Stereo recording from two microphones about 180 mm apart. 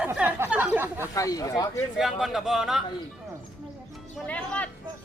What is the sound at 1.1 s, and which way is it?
Speech, 20° left (ahead or behind).